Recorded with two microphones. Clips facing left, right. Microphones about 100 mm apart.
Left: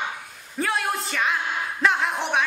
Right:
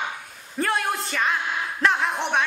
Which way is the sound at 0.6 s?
Centre (ahead or behind).